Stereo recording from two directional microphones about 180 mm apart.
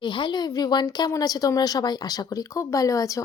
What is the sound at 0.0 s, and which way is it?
A woman's voice, 25° left (ahead or behind).